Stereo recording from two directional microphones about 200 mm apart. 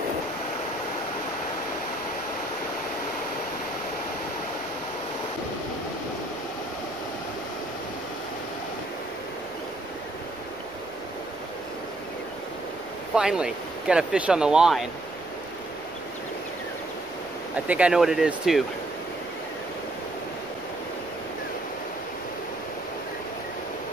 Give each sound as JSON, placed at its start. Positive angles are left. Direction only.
{"t": 13.1, "sound": "speech", "side_deg": -5}
{"t": 17.6, "sound": "speech", "side_deg": -5}